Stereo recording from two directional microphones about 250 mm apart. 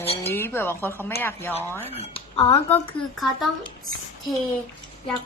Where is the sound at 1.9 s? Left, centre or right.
Left.